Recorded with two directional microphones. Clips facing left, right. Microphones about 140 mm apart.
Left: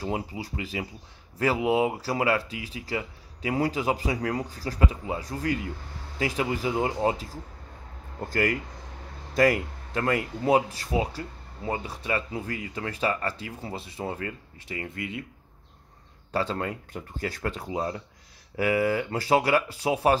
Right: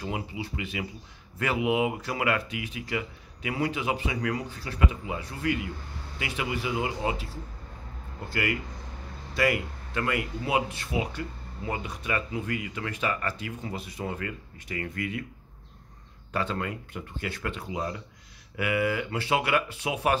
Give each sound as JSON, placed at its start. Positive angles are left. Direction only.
{"t": 0.0, "sound": "speech", "side_deg": 35}
{"t": 8.3, "sound": "speech", "side_deg": 40}
{"t": 16.3, "sound": "speech", "side_deg": 35}